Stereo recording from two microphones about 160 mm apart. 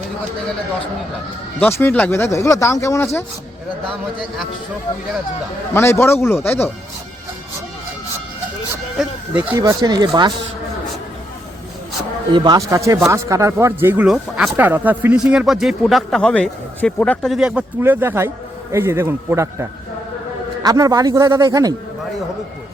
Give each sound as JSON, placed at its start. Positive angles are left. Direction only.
{"t": 1.5, "sound": "speech", "side_deg": 10}
{"t": 5.7, "sound": "speech", "side_deg": 15}
{"t": 9.0, "sound": "a sound", "side_deg": -10}
{"t": 9.6, "sound": "a man's voice", "side_deg": -25}
{"t": 12.3, "sound": "a man's voice", "side_deg": -25}
{"t": 17.3, "sound": "a man's voice", "side_deg": -5}